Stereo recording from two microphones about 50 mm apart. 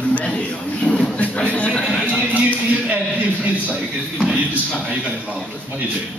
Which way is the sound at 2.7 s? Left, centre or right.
Right.